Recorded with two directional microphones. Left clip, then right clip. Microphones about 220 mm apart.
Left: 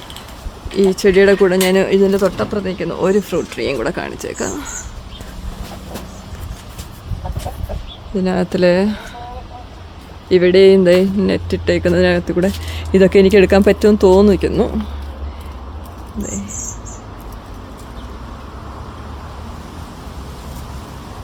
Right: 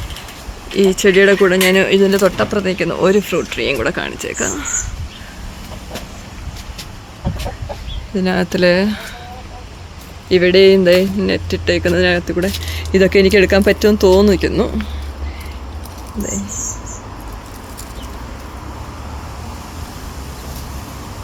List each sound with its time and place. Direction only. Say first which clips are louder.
0.8 s speech: right 1 dB; centre (ahead or behind)
8.1 s speech: right 1 dB; 10° left (ahead or behind)
10.2 s speech: even; 10° left (ahead or behind)